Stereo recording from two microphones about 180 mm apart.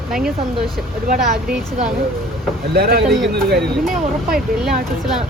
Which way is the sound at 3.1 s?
Centre (ahead or behind).